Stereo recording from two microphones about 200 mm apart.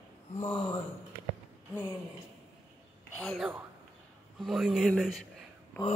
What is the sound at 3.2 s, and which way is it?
A woman's voice, centre (ahead or behind).